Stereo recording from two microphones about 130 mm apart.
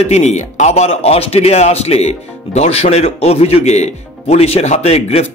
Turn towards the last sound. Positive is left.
turn(degrees=55)  # may be behind; listen again after turning